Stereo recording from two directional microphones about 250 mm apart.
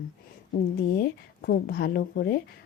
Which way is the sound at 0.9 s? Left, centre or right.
Left.